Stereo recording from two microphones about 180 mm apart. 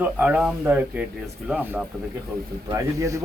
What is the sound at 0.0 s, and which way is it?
Speech, 5° right (ahead or behind).